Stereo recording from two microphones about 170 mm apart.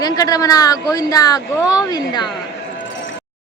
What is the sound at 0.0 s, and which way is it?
Speech, 20° left (ahead or behind).